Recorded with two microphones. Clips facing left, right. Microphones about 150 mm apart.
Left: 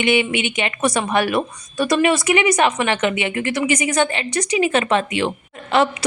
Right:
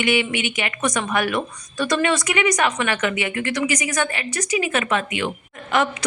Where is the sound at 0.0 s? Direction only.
20° left (ahead or behind).